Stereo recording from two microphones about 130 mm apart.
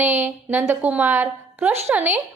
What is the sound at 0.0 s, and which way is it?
A woman's voice, 15° right (ahead or behind).